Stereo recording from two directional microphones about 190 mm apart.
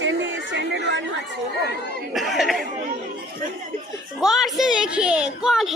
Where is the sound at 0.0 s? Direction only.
70° right (ahead or behind).